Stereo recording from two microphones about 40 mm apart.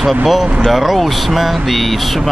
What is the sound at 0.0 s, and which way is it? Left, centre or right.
Speech, centre.